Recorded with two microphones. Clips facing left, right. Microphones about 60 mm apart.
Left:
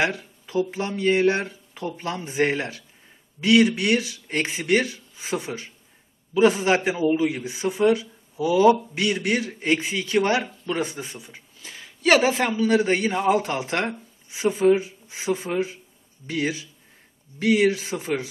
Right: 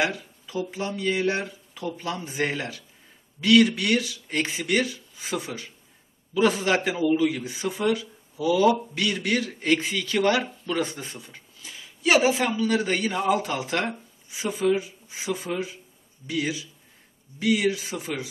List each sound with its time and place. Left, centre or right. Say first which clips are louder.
0.0 s speech: left 2 dB; left
3.3 s a man's voice: left 1 dB; centre
12.0 s speech: left 2 dB; left
12.4 s speech: left 4 dB; left